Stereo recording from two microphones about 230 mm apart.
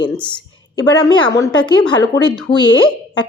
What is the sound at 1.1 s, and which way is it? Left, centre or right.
Speech, centre.